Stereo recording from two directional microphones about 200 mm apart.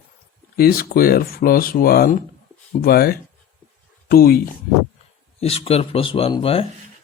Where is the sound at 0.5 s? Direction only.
50° left (ahead or behind).